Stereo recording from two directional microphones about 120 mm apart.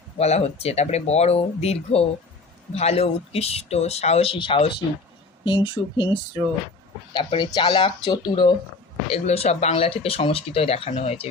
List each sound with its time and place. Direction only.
0.2 s speech: 60° left (ahead or behind); by 8.5 s 40° left (ahead or behind)
9.0 s speech: 55° left (ahead or behind)